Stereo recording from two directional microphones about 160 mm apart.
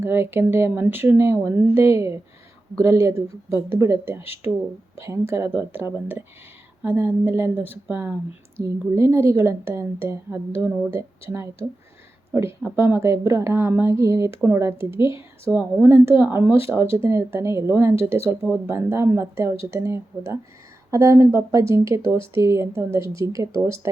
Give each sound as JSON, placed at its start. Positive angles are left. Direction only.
{"t": 0.0, "sound": "a woman's voice", "side_deg": -15}